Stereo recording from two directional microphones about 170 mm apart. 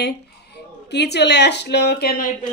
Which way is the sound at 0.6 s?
80° left.